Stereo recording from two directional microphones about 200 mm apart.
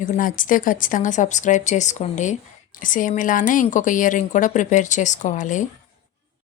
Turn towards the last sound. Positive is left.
turn(degrees=40)  # may be behind; listen again after turning